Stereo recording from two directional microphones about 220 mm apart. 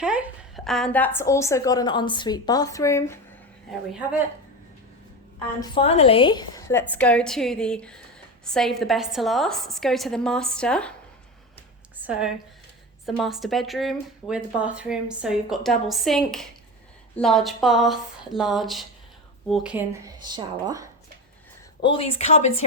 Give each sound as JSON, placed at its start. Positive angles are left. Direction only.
{"t": 0.0, "sound": "a woman's voice", "side_deg": -5}
{"t": 5.5, "sound": "a woman's voice", "side_deg": 25}
{"t": 13.1, "sound": "speech", "side_deg": 0}
{"t": 21.8, "sound": "a woman's voice", "side_deg": 25}